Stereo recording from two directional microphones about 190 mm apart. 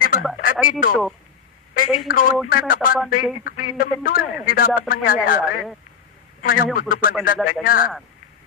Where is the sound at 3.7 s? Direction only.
50° left (ahead or behind).